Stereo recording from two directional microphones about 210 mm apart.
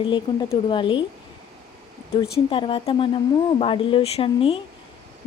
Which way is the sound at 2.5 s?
25° left (ahead or behind).